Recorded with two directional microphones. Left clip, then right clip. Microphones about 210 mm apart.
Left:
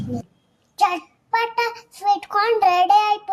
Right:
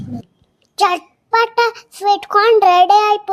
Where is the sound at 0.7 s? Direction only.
35° right (ahead or behind).